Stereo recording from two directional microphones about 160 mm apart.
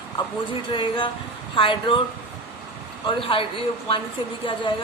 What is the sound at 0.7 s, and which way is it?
Speech, 30° left (ahead or behind).